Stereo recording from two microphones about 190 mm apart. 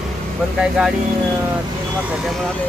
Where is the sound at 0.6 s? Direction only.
5° right (ahead or behind).